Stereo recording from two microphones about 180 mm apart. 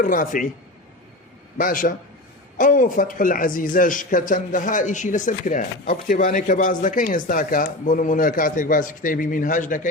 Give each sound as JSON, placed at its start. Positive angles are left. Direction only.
{"t": 0.0, "sound": "speech", "side_deg": 50}
{"t": 1.5, "sound": "speech", "side_deg": 50}